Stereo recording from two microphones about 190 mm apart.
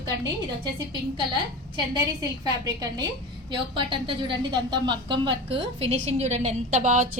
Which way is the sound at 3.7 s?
25° right (ahead or behind).